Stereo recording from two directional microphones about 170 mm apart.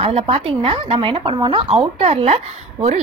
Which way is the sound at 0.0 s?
35° right (ahead or behind).